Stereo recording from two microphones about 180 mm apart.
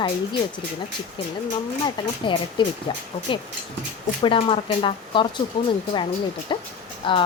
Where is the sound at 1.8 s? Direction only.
25° left (ahead or behind).